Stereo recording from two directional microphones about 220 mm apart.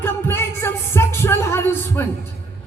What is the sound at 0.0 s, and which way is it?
Music, 10° left (ahead or behind).